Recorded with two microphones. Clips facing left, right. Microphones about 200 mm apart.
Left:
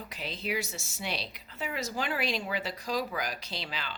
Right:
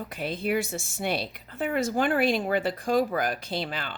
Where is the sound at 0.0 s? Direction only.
55° right (ahead or behind).